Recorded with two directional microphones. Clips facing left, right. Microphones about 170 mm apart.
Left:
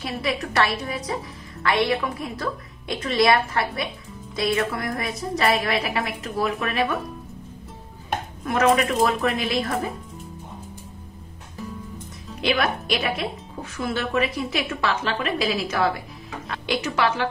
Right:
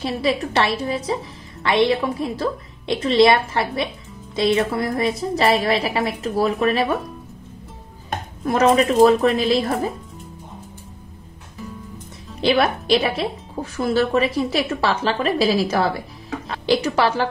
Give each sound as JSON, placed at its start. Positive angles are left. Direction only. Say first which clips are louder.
{"t": 0.0, "sound": "a woman's voice", "louder": "right 5 dB", "side_deg": -30}
{"t": 8.5, "sound": "speech", "louder": "right 4 dB", "side_deg": -30}
{"t": 12.4, "sound": "speech", "louder": "right 5 dB", "side_deg": -30}